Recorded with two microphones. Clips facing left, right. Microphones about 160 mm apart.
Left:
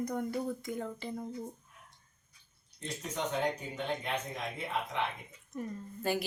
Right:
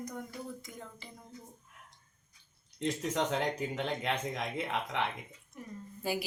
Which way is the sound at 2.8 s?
90° right.